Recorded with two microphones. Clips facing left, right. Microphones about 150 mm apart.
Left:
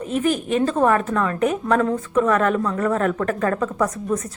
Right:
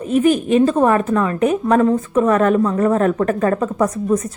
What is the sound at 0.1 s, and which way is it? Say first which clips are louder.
A woman's voice: right 7 dB; 15° right (ahead or behind).